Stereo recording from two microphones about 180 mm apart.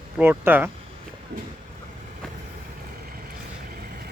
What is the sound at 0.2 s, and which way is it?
Speech, 10° right (ahead or behind).